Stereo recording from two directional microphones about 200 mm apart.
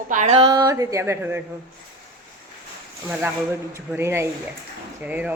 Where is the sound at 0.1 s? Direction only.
35° right (ahead or behind).